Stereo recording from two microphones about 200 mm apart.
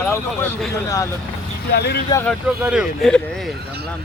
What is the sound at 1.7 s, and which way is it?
Speech, 55° left (ahead or behind).